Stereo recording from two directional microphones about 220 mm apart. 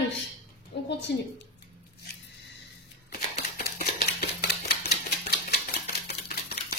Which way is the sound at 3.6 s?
45° left (ahead or behind).